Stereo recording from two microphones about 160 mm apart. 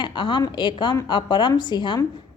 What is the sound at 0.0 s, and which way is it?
A woman's voice, 30° left (ahead or behind).